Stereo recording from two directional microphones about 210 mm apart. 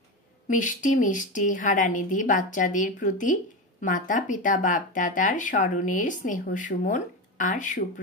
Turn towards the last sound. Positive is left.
turn(degrees=35)  # may be behind; listen again after turning